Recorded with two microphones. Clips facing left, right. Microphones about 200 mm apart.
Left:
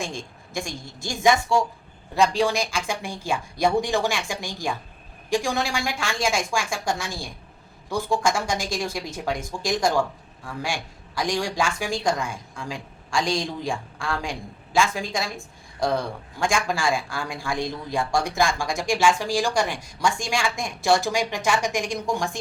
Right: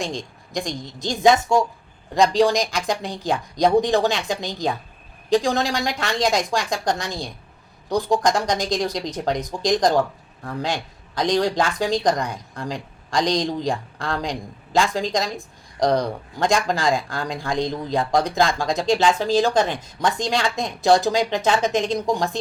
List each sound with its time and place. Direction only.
0.0 s a woman's voice: 15° right (ahead or behind)
2.3 s speech: 35° right (ahead or behind)
2.8 s a man's voice: 15° right (ahead or behind)